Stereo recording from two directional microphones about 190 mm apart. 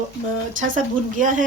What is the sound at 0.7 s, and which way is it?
Speech, 45° right (ahead or behind).